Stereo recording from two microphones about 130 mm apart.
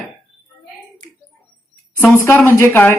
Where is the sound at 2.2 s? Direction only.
20° left (ahead or behind).